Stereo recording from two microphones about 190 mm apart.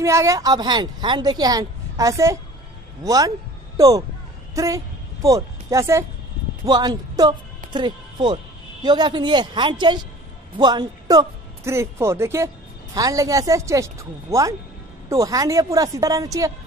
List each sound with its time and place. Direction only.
0.0 s a woman's voice: 15° right (ahead or behind)